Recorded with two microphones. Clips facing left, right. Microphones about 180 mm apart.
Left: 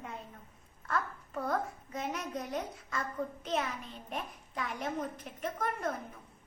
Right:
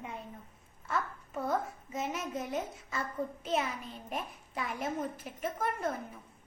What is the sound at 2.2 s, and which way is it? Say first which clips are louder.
Speech: right 1 dB; 25° right (ahead or behind).